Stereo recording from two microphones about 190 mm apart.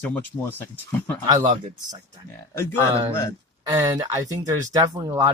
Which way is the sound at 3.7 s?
20° right (ahead or behind).